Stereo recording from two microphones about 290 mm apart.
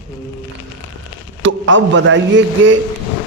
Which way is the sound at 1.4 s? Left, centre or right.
Right.